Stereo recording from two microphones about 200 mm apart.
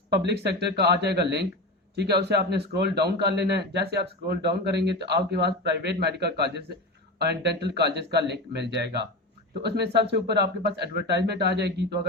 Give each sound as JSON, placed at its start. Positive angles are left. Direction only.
{"t": 0.3, "sound": "a man's voice", "side_deg": -55}